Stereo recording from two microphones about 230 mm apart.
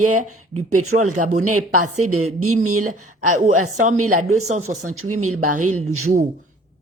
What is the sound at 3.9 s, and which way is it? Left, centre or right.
Speech, right.